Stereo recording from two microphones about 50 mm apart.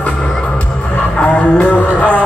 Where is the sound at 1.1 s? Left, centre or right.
Left.